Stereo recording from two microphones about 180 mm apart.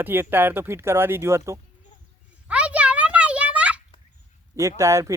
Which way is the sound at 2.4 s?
5° right (ahead or behind).